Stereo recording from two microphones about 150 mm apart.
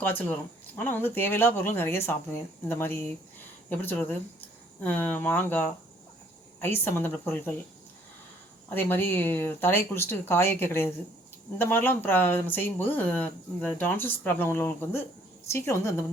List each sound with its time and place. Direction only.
0.0 s speech: 10° left (ahead or behind)
8.7 s a woman's voice: 15° left (ahead or behind)